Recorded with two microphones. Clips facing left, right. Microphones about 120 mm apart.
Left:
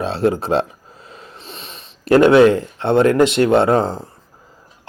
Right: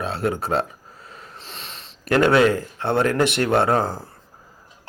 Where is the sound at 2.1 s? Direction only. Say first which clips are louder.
Left 6 dB; 25° left (ahead or behind).